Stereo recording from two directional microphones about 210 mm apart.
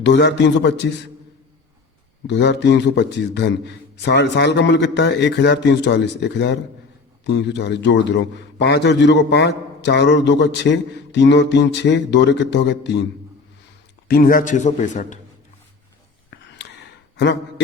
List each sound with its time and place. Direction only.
0.0 s a man's voice: 55° left (ahead or behind)
2.2 s a man's voice: 55° left (ahead or behind)
14.1 s a man's voice: 40° left (ahead or behind)
16.3 s a sound: 55° left (ahead or behind)